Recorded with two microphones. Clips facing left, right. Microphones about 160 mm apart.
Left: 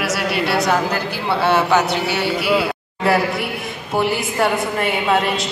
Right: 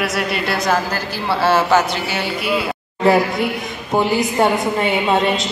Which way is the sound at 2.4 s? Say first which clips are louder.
Left 2 dB; 70° left (ahead or behind).